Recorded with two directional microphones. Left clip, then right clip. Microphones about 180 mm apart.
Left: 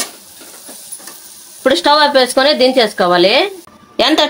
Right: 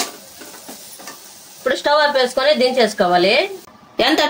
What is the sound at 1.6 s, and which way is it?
Speech, 60° left (ahead or behind).